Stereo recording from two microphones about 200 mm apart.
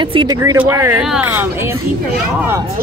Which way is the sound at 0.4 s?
15° right (ahead or behind).